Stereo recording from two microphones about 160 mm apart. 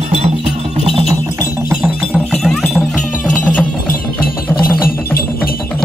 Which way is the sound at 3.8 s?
60° left (ahead or behind).